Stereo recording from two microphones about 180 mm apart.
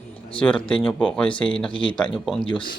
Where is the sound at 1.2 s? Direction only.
30° left (ahead or behind).